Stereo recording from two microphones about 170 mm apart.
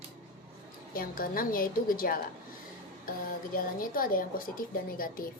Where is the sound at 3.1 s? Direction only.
55° left (ahead or behind).